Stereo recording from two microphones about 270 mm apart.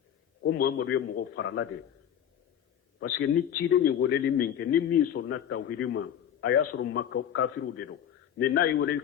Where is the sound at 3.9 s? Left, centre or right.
Left.